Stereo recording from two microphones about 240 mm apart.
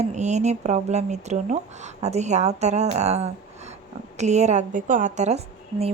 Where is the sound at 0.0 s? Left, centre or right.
Right.